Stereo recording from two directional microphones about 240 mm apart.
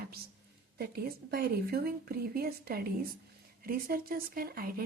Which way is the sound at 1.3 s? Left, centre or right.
Right.